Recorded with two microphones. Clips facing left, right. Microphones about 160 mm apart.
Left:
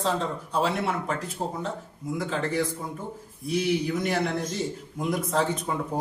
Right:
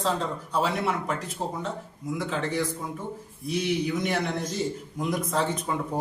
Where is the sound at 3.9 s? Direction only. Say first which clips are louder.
Left 1 dB; centre (ahead or behind).